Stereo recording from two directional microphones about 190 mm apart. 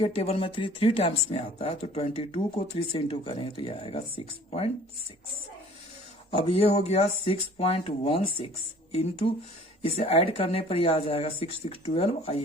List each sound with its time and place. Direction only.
0.0 s speech: 30° left (ahead or behind)
6.3 s speech: 30° left (ahead or behind)